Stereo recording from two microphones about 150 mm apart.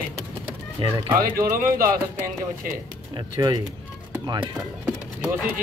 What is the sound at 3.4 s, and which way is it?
Speech, 25° right (ahead or behind).